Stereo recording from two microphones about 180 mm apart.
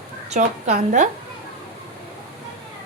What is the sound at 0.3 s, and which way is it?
Speech, 40° right (ahead or behind).